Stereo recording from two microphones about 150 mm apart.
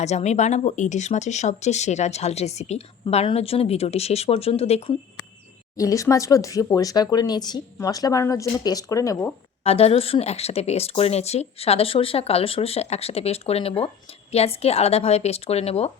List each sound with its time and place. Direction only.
0.0 s speech: 50° left (ahead or behind)
5.7 s speech: 20° left (ahead or behind)
9.6 s speech: 40° left (ahead or behind)